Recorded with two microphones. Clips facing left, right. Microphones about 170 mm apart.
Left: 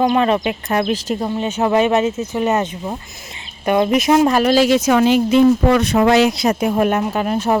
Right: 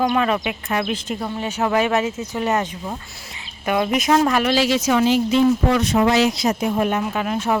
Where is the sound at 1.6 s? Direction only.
25° left (ahead or behind).